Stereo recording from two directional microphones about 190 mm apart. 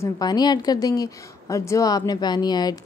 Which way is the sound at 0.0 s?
20° left (ahead or behind).